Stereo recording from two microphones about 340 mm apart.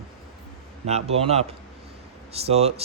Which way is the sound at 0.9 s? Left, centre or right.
Centre.